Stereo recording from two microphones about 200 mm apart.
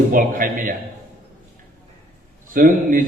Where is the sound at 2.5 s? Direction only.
40° right (ahead or behind).